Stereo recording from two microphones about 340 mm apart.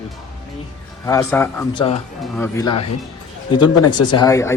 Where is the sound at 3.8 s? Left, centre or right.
Left.